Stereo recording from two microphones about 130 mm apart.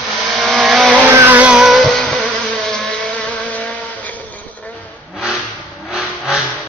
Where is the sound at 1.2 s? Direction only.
20° right (ahead or behind).